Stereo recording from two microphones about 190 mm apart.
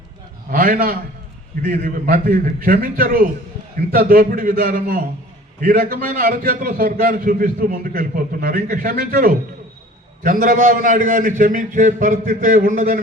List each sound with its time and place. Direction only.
0.5 s a man's voice: 50° right (ahead or behind)
10.4 s a man's voice: 50° right (ahead or behind)